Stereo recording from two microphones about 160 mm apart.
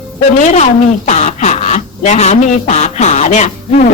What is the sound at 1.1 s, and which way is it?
Speech, 45° left (ahead or behind).